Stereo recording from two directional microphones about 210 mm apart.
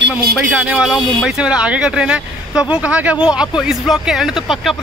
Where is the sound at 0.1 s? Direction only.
5° right (ahead or behind).